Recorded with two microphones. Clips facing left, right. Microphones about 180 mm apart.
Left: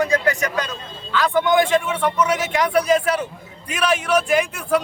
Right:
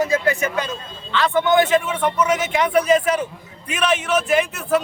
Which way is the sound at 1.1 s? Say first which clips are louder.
Even; 5° left (ahead or behind).